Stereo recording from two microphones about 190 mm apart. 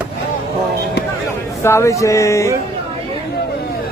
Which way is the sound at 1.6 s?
15° left (ahead or behind).